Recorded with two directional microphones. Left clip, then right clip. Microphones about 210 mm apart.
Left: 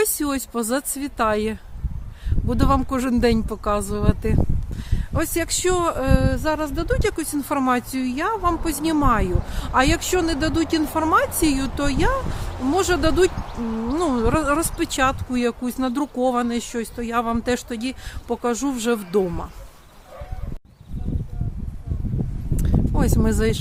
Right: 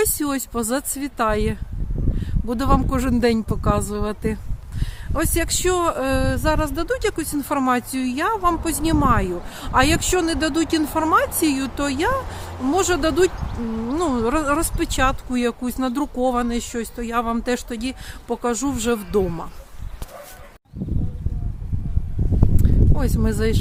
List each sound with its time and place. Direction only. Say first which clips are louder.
0.0 s speech: even; centre (ahead or behind)
13.6 s speech: even; 35° left (ahead or behind)
13.9 s speech: even; centre (ahead or behind)
22.5 s a sound: left 6 dB; 10° left (ahead or behind)